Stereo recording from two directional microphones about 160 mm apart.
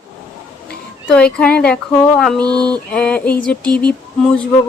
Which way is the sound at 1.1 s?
5° left (ahead or behind).